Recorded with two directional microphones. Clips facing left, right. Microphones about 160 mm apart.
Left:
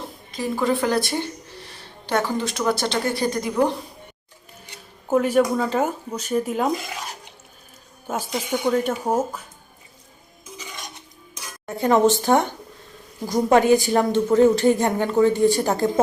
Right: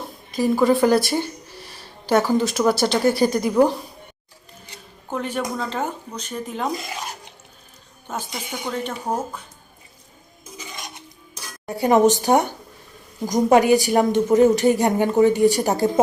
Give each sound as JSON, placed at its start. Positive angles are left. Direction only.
{"t": 0.3, "sound": "speech", "side_deg": -5}
{"t": 5.0, "sound": "speech", "side_deg": 5}
{"t": 8.0, "sound": "speech", "side_deg": 10}
{"t": 11.6, "sound": "a woman's voice", "side_deg": -15}